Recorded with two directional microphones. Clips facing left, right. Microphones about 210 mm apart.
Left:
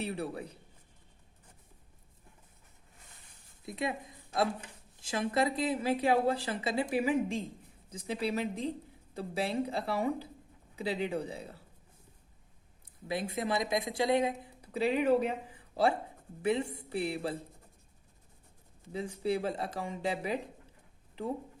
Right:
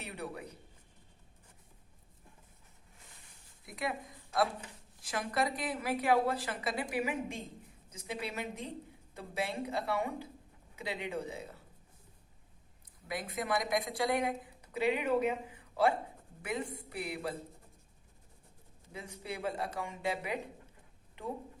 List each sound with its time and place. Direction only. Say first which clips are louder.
0.0 s speech: left 6 dB; 30° left (ahead or behind)
3.7 s a woman's voice: left 3 dB; 25° left (ahead or behind)
13.1 s a woman's voice: left 3 dB; 25° left (ahead or behind)
18.9 s speech: left 10 dB; 30° left (ahead or behind)